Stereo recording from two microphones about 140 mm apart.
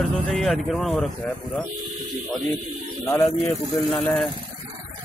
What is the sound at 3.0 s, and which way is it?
Speech, 20° left (ahead or behind).